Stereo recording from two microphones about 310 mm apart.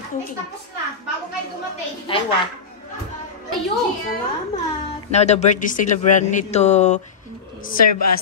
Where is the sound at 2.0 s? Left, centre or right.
Centre.